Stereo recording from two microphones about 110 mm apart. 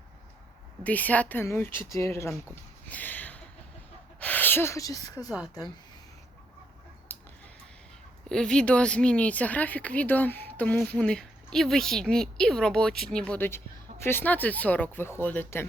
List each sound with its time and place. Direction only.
0.9 s speech: 15° left (ahead or behind)
2.9 s a sound: 15° left (ahead or behind)
4.2 s speech: 15° left (ahead or behind); by 5.3 s 35° left (ahead or behind)
7.1 s chicken: 15° left (ahead or behind)
8.3 s a woman's voice: 5° left (ahead or behind)